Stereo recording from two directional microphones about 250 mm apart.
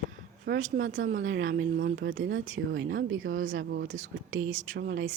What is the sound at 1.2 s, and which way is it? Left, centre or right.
Speech, right.